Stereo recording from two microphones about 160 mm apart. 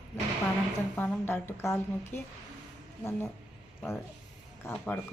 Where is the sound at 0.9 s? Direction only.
10° left (ahead or behind).